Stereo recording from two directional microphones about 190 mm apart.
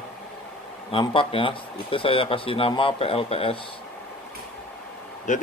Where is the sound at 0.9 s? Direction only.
30° left (ahead or behind).